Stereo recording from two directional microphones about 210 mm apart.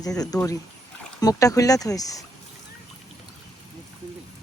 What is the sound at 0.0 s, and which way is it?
Speech, 15° left (ahead or behind).